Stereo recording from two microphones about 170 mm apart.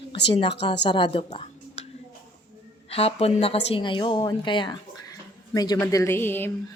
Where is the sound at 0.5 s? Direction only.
85° left.